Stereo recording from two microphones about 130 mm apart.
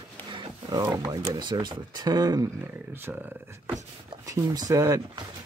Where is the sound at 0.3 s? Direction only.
35° right (ahead or behind).